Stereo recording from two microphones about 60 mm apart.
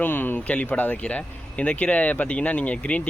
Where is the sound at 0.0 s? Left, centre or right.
Left.